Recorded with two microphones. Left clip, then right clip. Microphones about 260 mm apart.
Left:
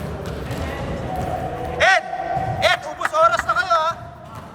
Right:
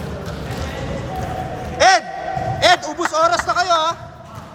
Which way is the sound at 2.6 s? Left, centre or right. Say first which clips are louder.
Right 6 dB; right.